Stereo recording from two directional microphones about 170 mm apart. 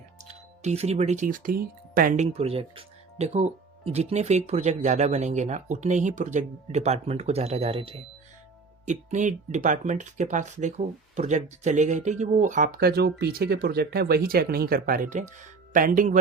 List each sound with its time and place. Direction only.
0.3 s speech: 40° right (ahead or behind)
8.9 s speech: 45° right (ahead or behind)